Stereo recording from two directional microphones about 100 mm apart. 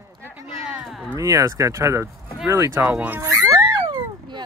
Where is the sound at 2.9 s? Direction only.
20° right (ahead or behind).